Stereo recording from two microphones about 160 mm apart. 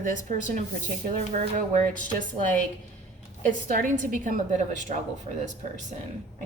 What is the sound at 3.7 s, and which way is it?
A woman's voice, 55° right (ahead or behind).